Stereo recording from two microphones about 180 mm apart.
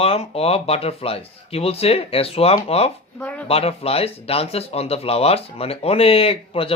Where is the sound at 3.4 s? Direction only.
35° left (ahead or behind).